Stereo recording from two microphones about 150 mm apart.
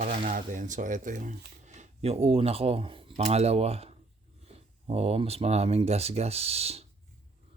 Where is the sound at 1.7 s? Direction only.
45° right (ahead or behind).